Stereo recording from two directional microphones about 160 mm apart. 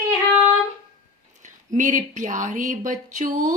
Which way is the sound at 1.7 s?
50° right (ahead or behind).